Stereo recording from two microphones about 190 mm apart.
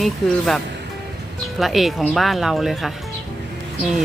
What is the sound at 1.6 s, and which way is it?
Speech, centre (ahead or behind).